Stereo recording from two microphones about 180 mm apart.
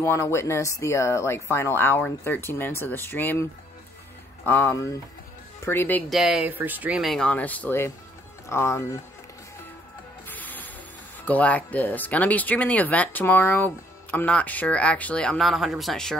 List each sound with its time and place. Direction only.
0.0 s speech: 15° left (ahead or behind)
4.5 s speech: 15° left (ahead or behind)
10.2 s music: 10° left (ahead or behind)
11.2 s speech: 10° left (ahead or behind)